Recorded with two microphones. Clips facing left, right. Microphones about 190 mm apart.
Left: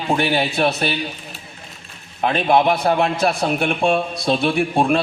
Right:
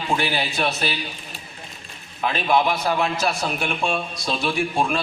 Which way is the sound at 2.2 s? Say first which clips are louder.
Left 4 dB; 55° left (ahead or behind).